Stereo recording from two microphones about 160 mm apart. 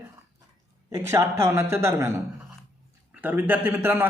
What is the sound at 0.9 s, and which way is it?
A man's voice, 20° right (ahead or behind).